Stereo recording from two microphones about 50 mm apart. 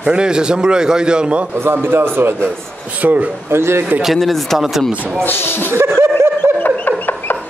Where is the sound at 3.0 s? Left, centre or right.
Right.